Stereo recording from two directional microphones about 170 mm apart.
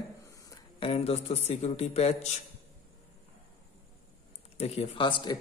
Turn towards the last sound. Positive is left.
turn(degrees=30)  # may be behind; listen again after turning